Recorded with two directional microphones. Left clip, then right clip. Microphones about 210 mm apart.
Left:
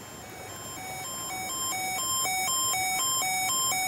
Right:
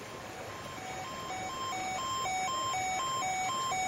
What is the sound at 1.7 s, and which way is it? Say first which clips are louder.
Alarm clock: left 4 dB; 20° left (ahead or behind).